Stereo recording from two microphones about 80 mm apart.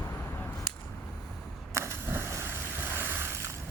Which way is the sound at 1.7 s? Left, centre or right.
Right.